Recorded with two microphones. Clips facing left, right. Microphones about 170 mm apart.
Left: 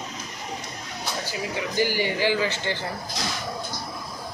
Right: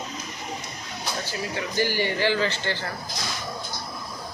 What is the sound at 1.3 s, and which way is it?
Speech, 15° left (ahead or behind).